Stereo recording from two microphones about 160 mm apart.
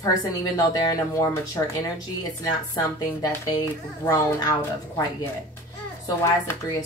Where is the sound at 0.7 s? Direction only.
20° left (ahead or behind).